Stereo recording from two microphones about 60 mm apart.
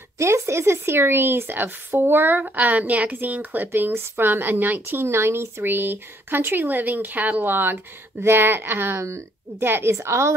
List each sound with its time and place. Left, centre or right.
0.2 s speech: right
9.0 s speech: right